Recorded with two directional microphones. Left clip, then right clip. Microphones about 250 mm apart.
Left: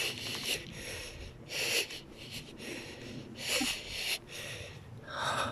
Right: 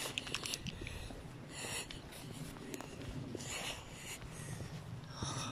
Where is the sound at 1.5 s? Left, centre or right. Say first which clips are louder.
Left 12 dB; left.